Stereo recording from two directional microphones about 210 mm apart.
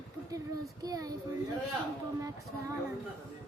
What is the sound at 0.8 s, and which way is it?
Child singing, 20° right (ahead or behind).